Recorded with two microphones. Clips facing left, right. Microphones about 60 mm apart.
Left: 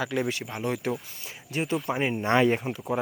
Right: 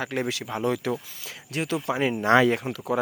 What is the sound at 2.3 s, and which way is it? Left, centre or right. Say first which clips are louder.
Speech: right 2 dB; right.